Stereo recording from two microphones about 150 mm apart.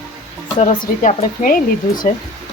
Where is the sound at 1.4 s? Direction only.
70° left (ahead or behind).